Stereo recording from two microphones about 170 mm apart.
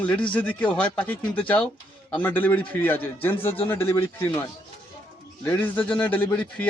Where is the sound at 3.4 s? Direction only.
35° left (ahead or behind).